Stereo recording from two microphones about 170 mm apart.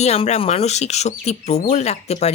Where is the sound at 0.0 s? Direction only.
40° left (ahead or behind).